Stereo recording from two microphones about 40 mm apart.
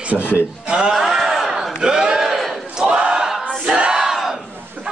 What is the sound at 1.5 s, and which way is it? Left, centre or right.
Battle cry, centre.